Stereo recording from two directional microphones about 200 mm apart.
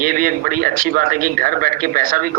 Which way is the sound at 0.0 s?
45° right (ahead or behind).